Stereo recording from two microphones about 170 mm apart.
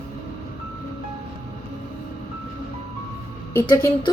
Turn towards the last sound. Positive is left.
turn(degrees=15)  # may be behind; listen again after turning